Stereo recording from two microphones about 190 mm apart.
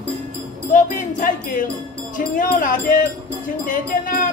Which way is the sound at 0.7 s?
45° left (ahead or behind).